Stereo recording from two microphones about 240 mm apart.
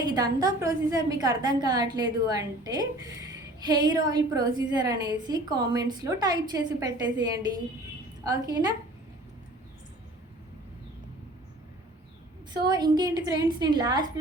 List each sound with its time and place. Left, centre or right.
0.0 s a woman's voice: centre
12.6 s a woman's voice: centre